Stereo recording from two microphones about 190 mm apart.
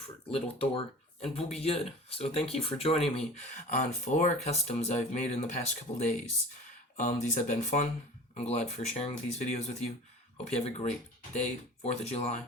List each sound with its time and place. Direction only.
0.3 s speech: 30° left (ahead or behind)